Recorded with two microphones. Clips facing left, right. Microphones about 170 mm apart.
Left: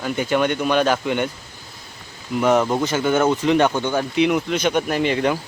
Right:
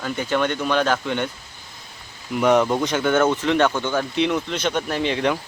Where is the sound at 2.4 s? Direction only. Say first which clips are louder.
Even; 5° left (ahead or behind).